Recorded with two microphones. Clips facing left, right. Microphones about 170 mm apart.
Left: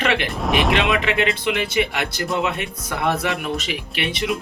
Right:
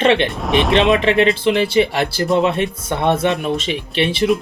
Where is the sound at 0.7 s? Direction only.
25° right (ahead or behind).